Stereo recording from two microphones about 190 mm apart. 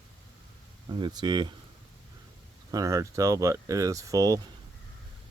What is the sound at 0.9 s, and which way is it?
Speech, 20° right (ahead or behind).